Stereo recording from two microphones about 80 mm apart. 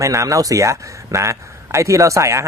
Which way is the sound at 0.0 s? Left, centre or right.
Right.